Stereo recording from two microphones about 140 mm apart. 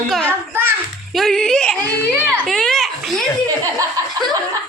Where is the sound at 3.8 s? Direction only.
30° right (ahead or behind).